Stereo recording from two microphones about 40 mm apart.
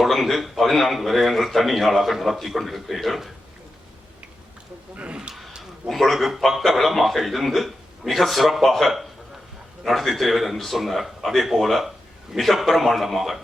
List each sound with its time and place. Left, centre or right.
0.0 s a man's voice: centre
4.9 s speech: right
5.9 s a man's voice: centre